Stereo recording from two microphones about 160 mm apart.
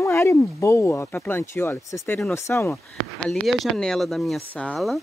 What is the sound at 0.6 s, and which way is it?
Speech, 20° left (ahead or behind).